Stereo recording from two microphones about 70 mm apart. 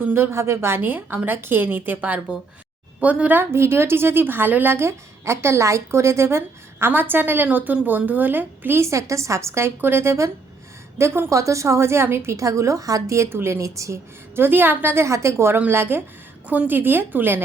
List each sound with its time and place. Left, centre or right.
0.0 s a woman's voice: right
3.5 s a woman's voice: right
8.8 s a woman's voice: right
14.3 s a woman's voice: right
15.0 s a woman's voice: right
15.5 s a woman's voice: right